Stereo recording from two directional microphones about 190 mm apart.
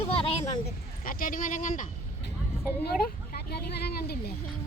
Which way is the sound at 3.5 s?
55° left (ahead or behind).